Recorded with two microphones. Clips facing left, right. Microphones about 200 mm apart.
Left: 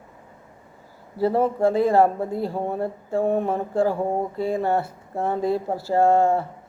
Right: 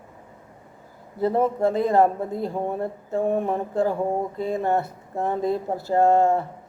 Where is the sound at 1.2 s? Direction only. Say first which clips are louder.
Left 1 dB; 30° left (ahead or behind).